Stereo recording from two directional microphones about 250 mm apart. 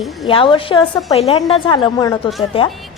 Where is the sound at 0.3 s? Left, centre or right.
Left.